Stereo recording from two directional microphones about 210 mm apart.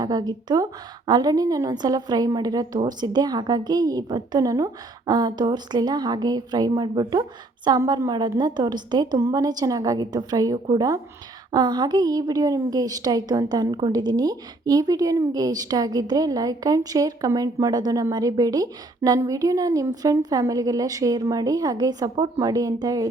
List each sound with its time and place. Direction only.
0.0 s a woman's voice: 20° right (ahead or behind)